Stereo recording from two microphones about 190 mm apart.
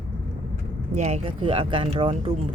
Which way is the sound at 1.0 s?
35° right (ahead or behind).